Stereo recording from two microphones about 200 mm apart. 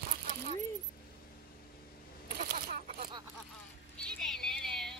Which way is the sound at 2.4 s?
45° right (ahead or behind).